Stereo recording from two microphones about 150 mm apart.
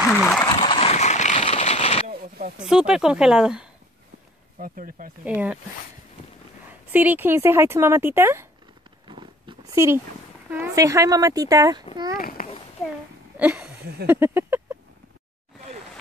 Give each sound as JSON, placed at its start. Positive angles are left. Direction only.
{"t": 0.1, "sound": "speech", "side_deg": 5}
{"t": 0.7, "sound": "a sound", "side_deg": 40}
{"t": 2.6, "sound": "speech", "side_deg": -5}
{"t": 4.6, "sound": "speech", "side_deg": -70}
{"t": 5.2, "sound": "speech", "side_deg": -10}
{"t": 6.9, "sound": "speech", "side_deg": -10}
{"t": 9.0, "sound": "a sound", "side_deg": -30}
{"t": 9.8, "sound": "speech", "side_deg": -20}
{"t": 12.2, "sound": "a child's voice", "side_deg": 75}
{"t": 13.4, "sound": "speech", "side_deg": -10}